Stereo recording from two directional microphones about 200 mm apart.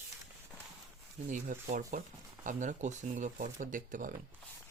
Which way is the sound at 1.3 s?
40° right (ahead or behind).